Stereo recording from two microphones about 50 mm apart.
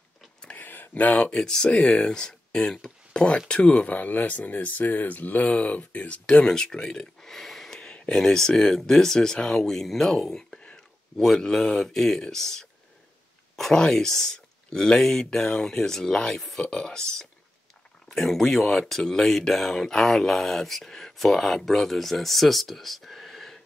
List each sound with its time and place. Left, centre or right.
0.6 s a sound: left
1.4 s speech: centre
6.4 s speech: centre